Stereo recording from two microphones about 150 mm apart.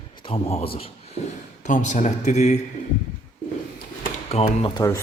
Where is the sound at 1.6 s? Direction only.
55° left (ahead or behind).